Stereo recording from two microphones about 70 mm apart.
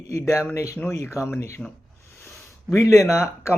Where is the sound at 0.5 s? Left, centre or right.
Left.